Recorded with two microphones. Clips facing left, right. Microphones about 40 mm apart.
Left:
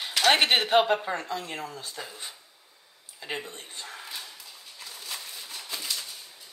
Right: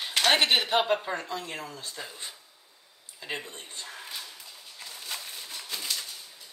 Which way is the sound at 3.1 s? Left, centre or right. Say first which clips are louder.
Left 1 dB; centre.